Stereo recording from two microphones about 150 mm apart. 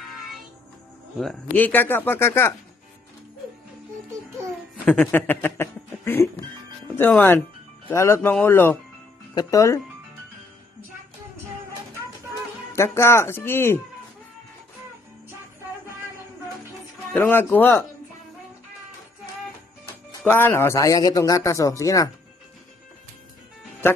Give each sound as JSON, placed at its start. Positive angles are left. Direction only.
{"t": 1.1, "sound": "speech", "side_deg": 5}
{"t": 5.0, "sound": "speech", "side_deg": 10}
{"t": 12.7, "sound": "speech", "side_deg": 15}
{"t": 17.1, "sound": "speech", "side_deg": 15}
{"t": 20.2, "sound": "a man's voice", "side_deg": 15}